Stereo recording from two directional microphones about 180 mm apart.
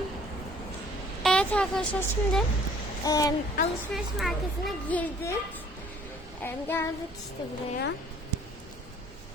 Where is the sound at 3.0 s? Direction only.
20° left (ahead or behind).